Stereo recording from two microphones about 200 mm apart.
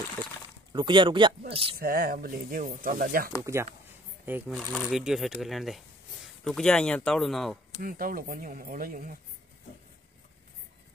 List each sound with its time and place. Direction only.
0.7 s speech: 25° right (ahead or behind)
1.8 s speech: 50° right (ahead or behind)
4.3 s speech: 10° right (ahead or behind)
7.8 s speech: 45° right (ahead or behind)